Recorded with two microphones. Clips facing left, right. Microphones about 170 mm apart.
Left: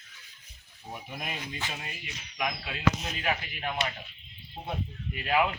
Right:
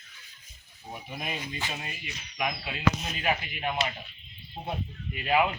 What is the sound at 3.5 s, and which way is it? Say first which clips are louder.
Speech: right 3 dB; 15° right (ahead or behind).